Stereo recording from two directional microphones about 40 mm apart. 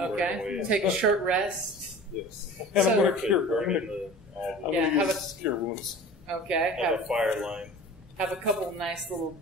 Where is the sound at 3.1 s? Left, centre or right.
Centre.